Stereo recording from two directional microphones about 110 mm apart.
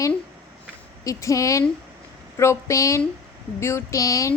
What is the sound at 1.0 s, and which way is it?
A woman's voice, 30° left (ahead or behind).